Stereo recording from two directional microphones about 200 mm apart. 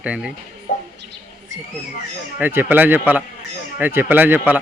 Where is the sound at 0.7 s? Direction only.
40° left (ahead or behind).